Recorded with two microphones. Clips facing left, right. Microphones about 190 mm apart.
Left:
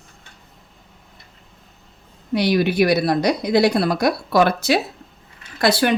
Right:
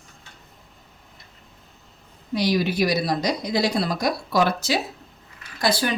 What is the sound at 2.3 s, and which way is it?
Speech, 60° left (ahead or behind).